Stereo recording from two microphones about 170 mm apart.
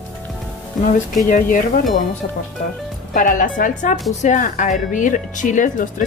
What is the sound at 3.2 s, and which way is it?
Speech, 50° left (ahead or behind).